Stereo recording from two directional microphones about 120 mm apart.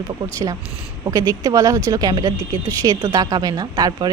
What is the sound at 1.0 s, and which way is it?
A woman's voice, 30° right (ahead or behind).